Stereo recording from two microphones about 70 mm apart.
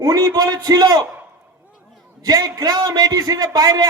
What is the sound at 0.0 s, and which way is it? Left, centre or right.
Speech, right.